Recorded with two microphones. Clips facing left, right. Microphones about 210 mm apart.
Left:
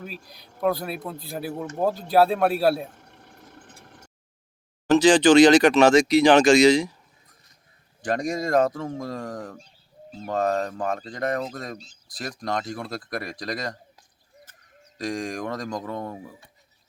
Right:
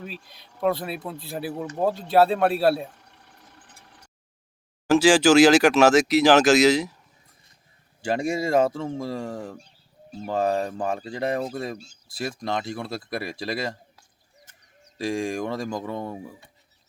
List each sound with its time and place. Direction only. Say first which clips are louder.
0.0 s speech: even; centre (ahead or behind)
2.9 s a sound: left 5 dB; 50° left (ahead or behind)
4.9 s speech: left 1 dB; 5° right (ahead or behind)
8.1 s speech: even; 10° right (ahead or behind)
14.9 s speech: right 3 dB; 5° right (ahead or behind)